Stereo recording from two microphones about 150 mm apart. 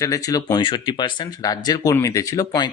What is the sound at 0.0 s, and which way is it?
Speech, 25° left (ahead or behind).